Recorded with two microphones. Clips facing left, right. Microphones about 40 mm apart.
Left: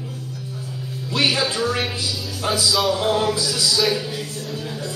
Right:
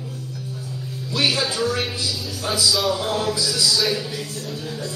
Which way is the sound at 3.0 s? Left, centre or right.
Left.